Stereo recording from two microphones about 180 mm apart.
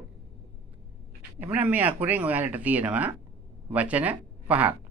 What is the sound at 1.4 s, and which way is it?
A man's voice, 10° right (ahead or behind).